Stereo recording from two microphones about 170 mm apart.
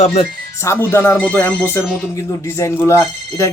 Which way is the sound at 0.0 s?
35° left (ahead or behind).